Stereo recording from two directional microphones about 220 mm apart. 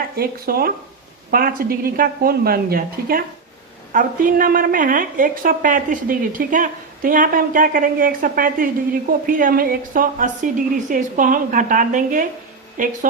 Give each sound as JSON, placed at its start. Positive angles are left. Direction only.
{"t": 0.2, "sound": "a woman's voice", "side_deg": -45}